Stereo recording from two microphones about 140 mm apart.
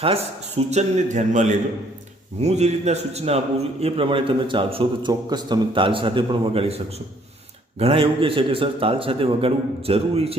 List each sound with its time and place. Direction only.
0.0 s a man's voice: 45° right (ahead or behind)